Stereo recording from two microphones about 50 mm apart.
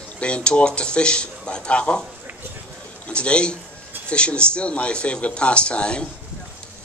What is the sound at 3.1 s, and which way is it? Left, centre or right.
A man's voice, left.